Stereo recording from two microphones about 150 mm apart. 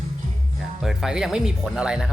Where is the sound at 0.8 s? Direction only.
Centre (ahead or behind).